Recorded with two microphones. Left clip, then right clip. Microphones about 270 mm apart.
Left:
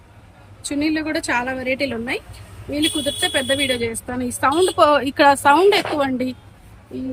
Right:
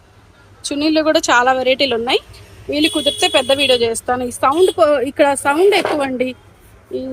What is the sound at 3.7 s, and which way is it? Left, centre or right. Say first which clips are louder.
Speech: right 8 dB; right.